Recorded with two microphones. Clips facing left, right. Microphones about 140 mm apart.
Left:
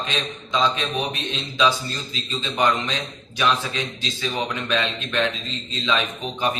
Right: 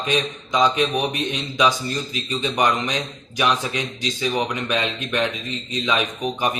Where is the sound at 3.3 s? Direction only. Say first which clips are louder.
Right 1 dB; 15° right (ahead or behind).